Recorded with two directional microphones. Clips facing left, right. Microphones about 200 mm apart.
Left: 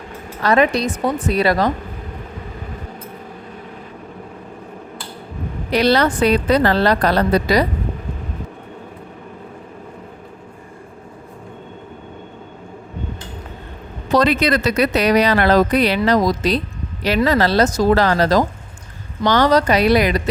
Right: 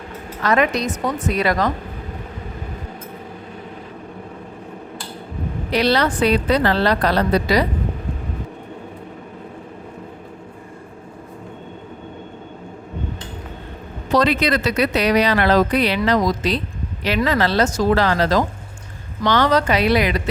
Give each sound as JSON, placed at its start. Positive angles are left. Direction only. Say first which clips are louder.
{"t": 0.4, "sound": "a woman's voice", "louder": "left 3 dB", "side_deg": 35}
{"t": 5.7, "sound": "a woman's voice", "louder": "left 3 dB", "side_deg": 45}
{"t": 14.2, "sound": "a woman's voice", "louder": "left 2 dB", "side_deg": 45}